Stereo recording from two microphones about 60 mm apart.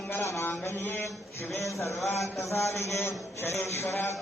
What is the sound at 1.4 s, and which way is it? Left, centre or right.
A man's voice, left.